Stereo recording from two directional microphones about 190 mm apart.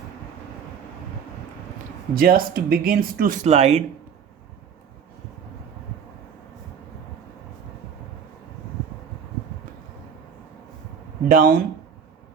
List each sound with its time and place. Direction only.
2.1 s speech: 50° right (ahead or behind); by 3.8 s 35° right (ahead or behind)
11.3 s speech: 50° right (ahead or behind)